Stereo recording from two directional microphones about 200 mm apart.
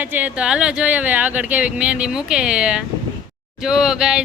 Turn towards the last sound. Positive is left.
turn(degrees=-5)  # may be behind; listen again after turning